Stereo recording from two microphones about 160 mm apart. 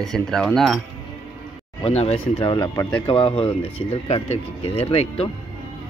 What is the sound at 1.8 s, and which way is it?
Speech, 40° left (ahead or behind).